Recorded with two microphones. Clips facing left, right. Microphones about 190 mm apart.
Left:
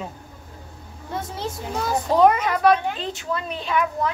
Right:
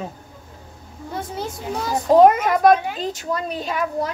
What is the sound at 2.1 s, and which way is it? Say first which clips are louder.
A child's voice: right 4 dB; 45° right (ahead or behind).